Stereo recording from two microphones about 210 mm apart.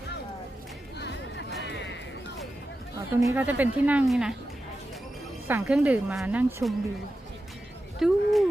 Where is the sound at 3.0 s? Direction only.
15° right (ahead or behind).